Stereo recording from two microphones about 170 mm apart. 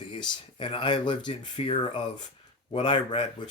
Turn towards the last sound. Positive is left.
turn(degrees=30)  # may be behind; listen again after turning